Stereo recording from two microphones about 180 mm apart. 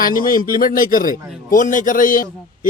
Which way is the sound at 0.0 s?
50° left (ahead or behind).